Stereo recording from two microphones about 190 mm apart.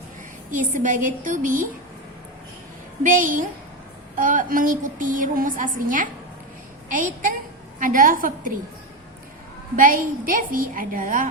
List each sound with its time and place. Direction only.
0.5 s a woman's voice: 40° right (ahead or behind)
3.0 s a woman's voice: 45° right (ahead or behind)
9.7 s a woman's voice: 50° right (ahead or behind)